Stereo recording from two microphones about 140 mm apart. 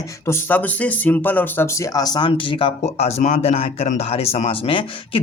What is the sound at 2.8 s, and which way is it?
Speech, 50° left (ahead or behind).